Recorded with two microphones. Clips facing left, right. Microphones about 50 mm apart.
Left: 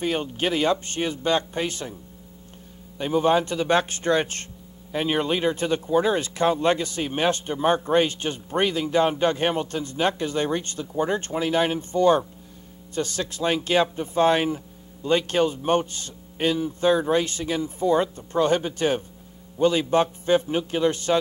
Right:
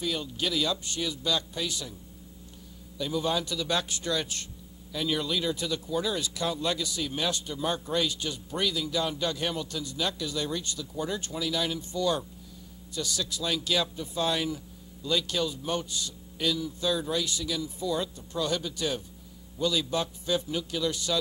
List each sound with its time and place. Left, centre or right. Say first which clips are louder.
0.0 s speech: left 6 dB; left
3.0 s speech: left 9 dB; left